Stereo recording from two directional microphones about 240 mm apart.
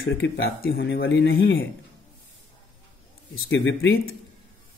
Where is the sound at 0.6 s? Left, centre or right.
Left.